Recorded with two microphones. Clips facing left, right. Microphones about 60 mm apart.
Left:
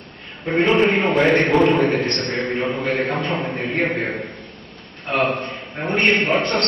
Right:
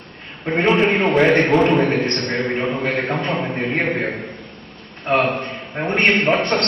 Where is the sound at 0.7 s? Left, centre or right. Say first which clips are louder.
Right 1 dB; centre.